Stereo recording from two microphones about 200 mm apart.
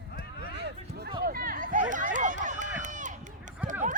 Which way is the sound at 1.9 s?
40° right (ahead or behind).